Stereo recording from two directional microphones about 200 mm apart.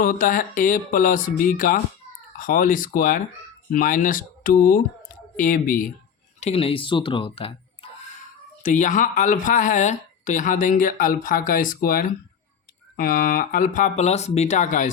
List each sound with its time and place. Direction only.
0.0 s speech: 45° left (ahead or behind)
6.4 s speech: 30° left (ahead or behind)
8.6 s speech: 40° left (ahead or behind)